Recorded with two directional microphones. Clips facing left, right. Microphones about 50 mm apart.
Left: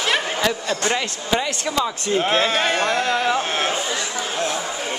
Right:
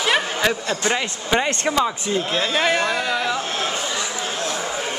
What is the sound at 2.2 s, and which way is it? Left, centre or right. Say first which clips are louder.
Speech: left 4 dB; left.